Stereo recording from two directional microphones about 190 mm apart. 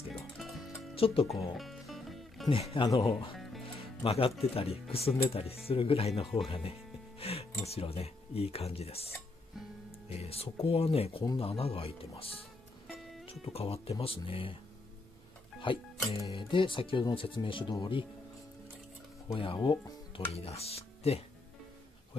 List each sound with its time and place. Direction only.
0.2 s music: centre (ahead or behind)
0.9 s speech: 30° left (ahead or behind)
1.3 s music: centre (ahead or behind)
2.7 s speech: 25° left (ahead or behind)
3.6 s music: 30° left (ahead or behind)
4.4 s speech: 30° left (ahead or behind)
10.1 s speech: 30° left (ahead or behind)
15.6 s speech: 25° left (ahead or behind)
19.3 s speech: 25° left (ahead or behind)